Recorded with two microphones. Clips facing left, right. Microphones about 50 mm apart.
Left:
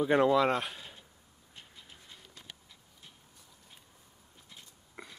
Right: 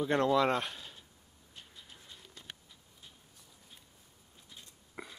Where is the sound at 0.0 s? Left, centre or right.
Centre.